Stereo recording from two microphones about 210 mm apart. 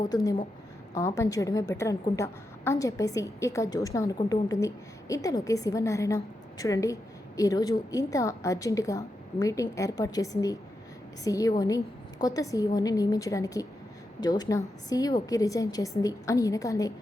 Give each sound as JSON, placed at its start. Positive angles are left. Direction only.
{"t": 0.9, "sound": "a woman's voice", "side_deg": 15}